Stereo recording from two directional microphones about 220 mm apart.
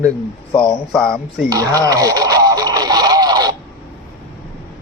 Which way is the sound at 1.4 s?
15° right (ahead or behind).